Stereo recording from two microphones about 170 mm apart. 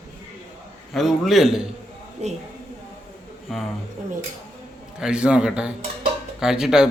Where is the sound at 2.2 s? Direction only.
45° right (ahead or behind).